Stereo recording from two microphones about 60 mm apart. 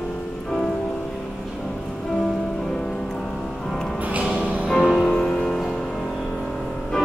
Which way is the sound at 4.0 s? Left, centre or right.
Right.